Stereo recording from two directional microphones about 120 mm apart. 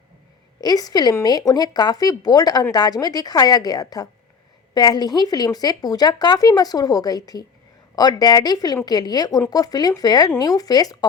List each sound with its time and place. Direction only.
0.6 s a woman's voice: 35° left (ahead or behind)